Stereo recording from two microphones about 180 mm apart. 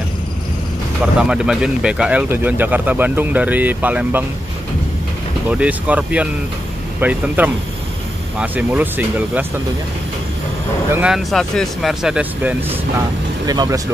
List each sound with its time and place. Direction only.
1.2 s speech: 5° right (ahead or behind)
5.5 s speech: 10° right (ahead or behind)
10.9 s speech: 5° right (ahead or behind)
13.5 s speech: 20° right (ahead or behind)